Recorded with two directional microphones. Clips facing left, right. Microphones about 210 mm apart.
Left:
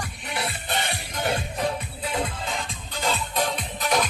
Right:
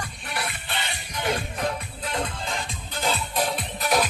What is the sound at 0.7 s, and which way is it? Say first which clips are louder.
Music: left 4 dB; 50° left (ahead or behind).